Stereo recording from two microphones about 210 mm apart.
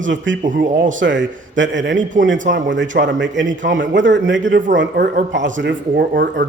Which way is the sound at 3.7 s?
60° right (ahead or behind).